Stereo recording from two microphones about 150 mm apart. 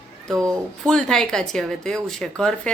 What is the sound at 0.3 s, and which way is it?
Speech, 20° right (ahead or behind).